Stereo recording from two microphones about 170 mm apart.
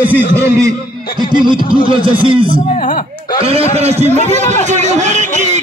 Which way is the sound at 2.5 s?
50° left (ahead or behind).